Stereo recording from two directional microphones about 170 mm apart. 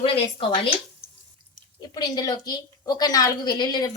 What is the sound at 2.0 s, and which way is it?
A woman's voice, 25° left (ahead or behind).